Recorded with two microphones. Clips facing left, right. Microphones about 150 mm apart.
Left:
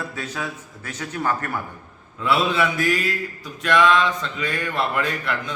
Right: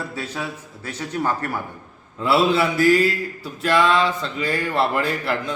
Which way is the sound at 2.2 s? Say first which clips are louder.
Right 3 dB; 30° right (ahead or behind).